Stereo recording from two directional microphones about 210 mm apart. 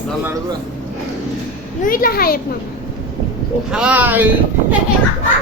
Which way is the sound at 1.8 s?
45° left (ahead or behind).